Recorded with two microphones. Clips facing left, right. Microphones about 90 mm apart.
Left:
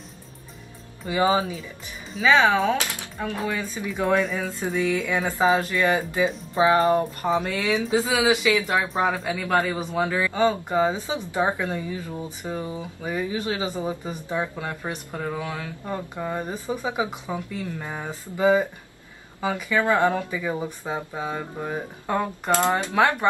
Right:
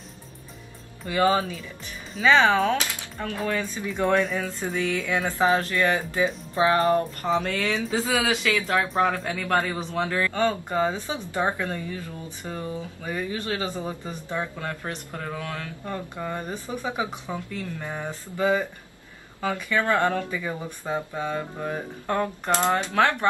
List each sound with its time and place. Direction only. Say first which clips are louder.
1.0 s speech: even; 15° left (ahead or behind)
2.1 s speech: even; centre (ahead or behind)
5.1 s speech: even; 15° left (ahead or behind)
6.5 s music: left 3 dB; 20° left (ahead or behind)
6.9 s speech: left 1 dB; 20° left (ahead or behind)
7.8 s speech: left 5 dB; 5° left (ahead or behind)